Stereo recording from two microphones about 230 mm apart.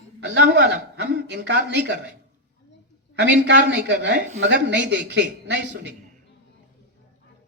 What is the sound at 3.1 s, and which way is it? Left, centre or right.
Speech, right.